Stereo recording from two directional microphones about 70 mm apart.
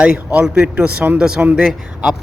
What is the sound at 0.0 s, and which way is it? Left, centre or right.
Speech, centre.